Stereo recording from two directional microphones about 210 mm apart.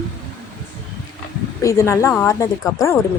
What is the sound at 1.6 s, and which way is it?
Speech, 15° left (ahead or behind).